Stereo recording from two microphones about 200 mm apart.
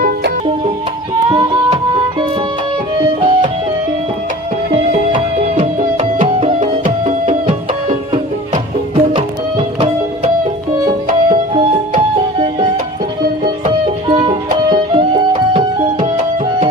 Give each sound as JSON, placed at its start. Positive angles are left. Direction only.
{"t": 1.3, "sound": "music", "side_deg": -25}
{"t": 3.2, "sound": "music", "side_deg": -25}
{"t": 4.7, "sound": "music", "side_deg": -35}
{"t": 11.5, "sound": "music", "side_deg": -25}